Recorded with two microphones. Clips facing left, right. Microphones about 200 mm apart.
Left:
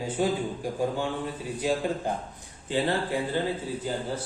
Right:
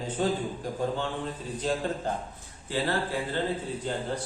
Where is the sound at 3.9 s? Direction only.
5° left (ahead or behind).